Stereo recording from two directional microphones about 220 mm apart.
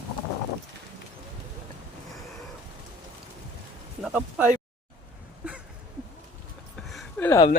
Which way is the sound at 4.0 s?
5° right (ahead or behind).